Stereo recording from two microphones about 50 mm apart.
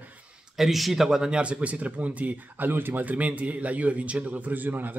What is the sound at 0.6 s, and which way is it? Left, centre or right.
A man's voice, centre.